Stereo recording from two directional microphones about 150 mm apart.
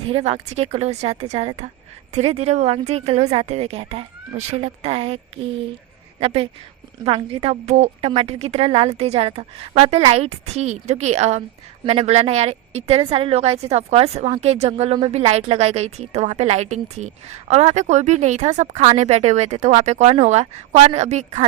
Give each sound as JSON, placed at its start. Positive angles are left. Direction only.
{"t": 0.1, "sound": "a woman's voice", "side_deg": -45}